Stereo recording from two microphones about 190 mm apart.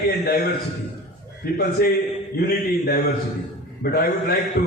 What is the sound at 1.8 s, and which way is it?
A man's voice, 50° left (ahead or behind).